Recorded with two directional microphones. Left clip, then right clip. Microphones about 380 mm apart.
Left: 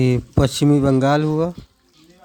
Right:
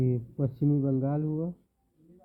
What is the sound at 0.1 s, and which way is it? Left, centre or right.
Speech, left.